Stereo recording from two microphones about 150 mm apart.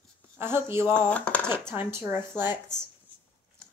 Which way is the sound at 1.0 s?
10° left (ahead or behind).